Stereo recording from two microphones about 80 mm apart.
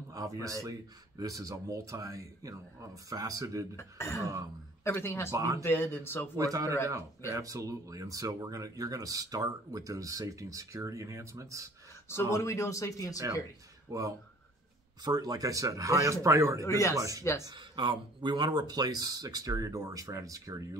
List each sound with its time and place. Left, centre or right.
0.1 s speech: right
3.7 s speech: left
5.3 s speech: right
5.6 s speech: left
6.3 s speech: right
12.1 s speech: left
13.8 s speech: right
16.6 s speech: left
17.5 s speech: right